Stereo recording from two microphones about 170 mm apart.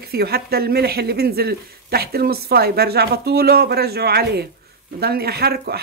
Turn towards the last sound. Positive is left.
turn(degrees=-65)  # may be behind; listen again after turning